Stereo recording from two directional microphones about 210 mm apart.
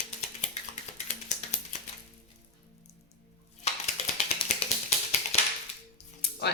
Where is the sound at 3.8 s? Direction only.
30° left (ahead or behind).